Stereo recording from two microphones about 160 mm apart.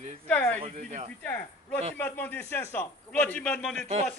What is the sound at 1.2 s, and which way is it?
Speech, 15° left (ahead or behind).